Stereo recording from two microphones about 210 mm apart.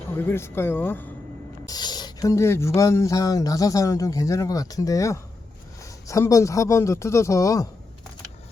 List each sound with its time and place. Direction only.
0.3 s speech: 10° left (ahead or behind)